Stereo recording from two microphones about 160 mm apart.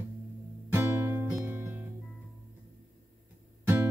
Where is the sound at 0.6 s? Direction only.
15° right (ahead or behind).